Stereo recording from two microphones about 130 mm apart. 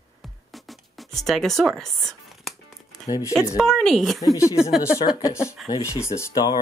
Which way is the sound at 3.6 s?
5° left (ahead or behind).